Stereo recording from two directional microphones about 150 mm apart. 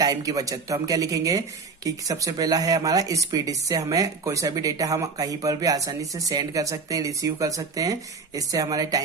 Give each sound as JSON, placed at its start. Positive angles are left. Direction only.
{"t": 0.0, "sound": "speech", "side_deg": -25}